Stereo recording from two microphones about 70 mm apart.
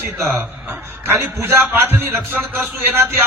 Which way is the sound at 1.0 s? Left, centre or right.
Right.